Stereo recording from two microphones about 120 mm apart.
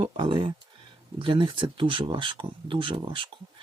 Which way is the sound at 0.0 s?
45° right (ahead or behind).